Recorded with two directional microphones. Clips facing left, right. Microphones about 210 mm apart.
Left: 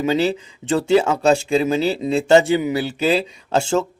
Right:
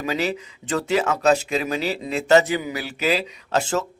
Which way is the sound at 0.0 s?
25° left (ahead or behind).